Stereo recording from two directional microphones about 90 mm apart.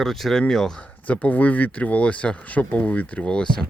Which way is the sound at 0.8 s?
15° left (ahead or behind).